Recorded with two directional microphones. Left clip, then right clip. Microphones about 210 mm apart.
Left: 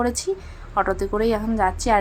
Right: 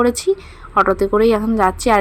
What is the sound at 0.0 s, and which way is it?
A woman's voice, 20° right (ahead or behind).